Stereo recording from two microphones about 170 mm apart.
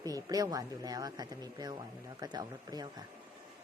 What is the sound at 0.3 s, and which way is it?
Speech, 20° right (ahead or behind).